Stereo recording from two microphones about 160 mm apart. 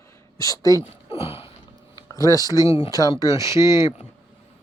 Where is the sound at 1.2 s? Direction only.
35° left (ahead or behind).